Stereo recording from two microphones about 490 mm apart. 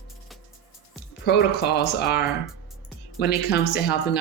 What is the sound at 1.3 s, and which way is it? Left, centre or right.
Speech, centre.